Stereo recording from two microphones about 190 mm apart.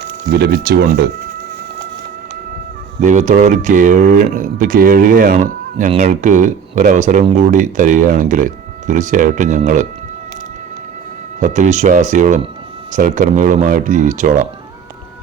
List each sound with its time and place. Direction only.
0.3 s speech: 55° right (ahead or behind)
3.0 s speech: 40° right (ahead or behind)
11.3 s speech: 40° right (ahead or behind)